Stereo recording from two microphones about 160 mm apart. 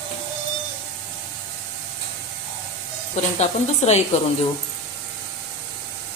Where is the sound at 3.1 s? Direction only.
45° left (ahead or behind).